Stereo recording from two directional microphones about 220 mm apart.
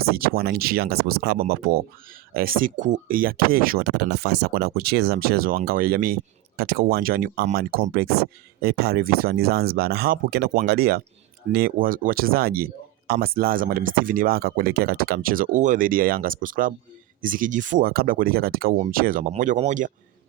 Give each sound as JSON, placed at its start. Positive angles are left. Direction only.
{"t": 0.0, "sound": "speech", "side_deg": -45}